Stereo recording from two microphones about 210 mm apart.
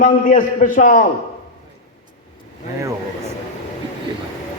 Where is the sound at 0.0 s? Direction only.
40° left (ahead or behind).